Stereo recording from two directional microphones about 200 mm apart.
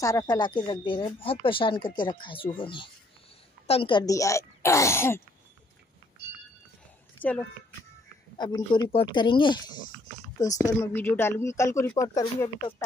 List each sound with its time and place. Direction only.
0.0 s speech: 20° left (ahead or behind)
8.4 s speech: 20° left (ahead or behind)
10.7 s speech: 10° left (ahead or behind)